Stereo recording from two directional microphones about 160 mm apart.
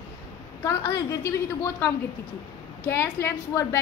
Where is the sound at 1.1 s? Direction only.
20° left (ahead or behind).